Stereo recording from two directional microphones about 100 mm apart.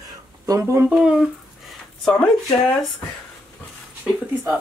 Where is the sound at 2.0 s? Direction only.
10° left (ahead or behind).